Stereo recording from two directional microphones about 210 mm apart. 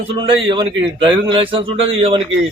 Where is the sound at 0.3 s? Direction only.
25° right (ahead or behind).